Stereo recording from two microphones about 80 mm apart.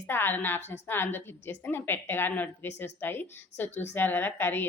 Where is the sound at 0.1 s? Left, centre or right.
Left.